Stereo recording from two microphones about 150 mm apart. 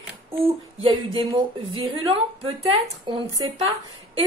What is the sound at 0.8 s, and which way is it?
A woman's voice, 35° right (ahead or behind).